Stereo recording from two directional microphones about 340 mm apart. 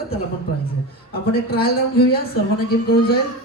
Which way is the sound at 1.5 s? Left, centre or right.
Left.